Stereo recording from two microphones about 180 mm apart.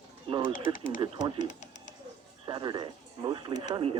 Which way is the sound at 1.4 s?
40° left (ahead or behind).